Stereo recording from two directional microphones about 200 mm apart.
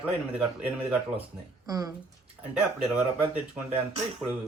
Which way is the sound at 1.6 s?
20° right (ahead or behind).